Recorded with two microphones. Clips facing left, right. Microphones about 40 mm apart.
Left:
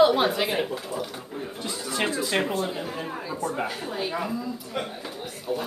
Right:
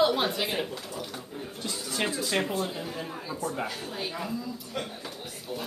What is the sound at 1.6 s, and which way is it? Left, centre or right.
Music, left.